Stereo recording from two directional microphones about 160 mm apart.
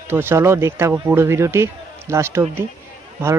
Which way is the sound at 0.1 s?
15° right (ahead or behind).